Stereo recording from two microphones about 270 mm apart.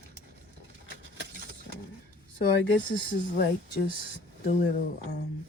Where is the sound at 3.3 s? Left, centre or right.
Left.